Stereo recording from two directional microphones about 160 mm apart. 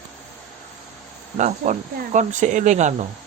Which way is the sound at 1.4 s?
50° right (ahead or behind).